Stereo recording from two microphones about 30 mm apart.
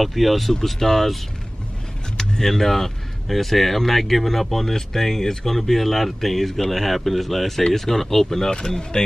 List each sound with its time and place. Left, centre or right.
0.0 s speech: centre
2.1 s speech: centre
8.5 s speech: left